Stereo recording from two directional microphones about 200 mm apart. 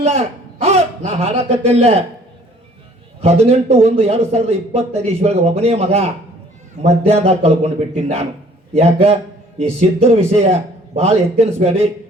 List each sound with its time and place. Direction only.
0.0 s a man's voice: 30° right (ahead or behind)
3.2 s a man's voice: 30° right (ahead or behind)